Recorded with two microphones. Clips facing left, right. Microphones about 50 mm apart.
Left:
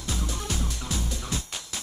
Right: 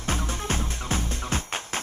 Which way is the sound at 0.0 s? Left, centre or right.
Right.